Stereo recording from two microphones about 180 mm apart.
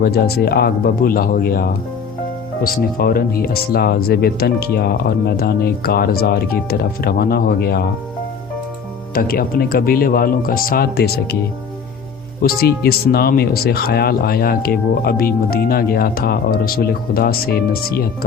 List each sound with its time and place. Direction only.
0.0 s speech: 60° left (ahead or behind)
3.0 s speech: 55° left (ahead or behind)
9.1 s speech: 55° left (ahead or behind)
12.4 s speech: 60° left (ahead or behind)